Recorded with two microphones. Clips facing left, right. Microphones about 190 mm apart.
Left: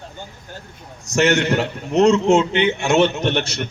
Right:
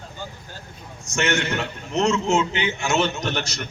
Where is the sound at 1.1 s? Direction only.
40° left (ahead or behind).